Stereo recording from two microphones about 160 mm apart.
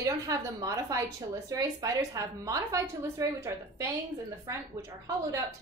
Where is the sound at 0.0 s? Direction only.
20° right (ahead or behind).